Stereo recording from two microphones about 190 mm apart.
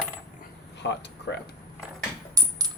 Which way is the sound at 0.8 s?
65° left (ahead or behind).